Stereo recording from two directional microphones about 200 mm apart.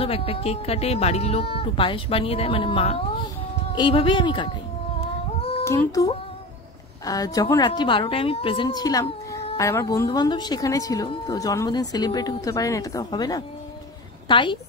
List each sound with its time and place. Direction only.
0.0 s speech: 30° left (ahead or behind)
5.6 s a woman's voice: 15° left (ahead or behind)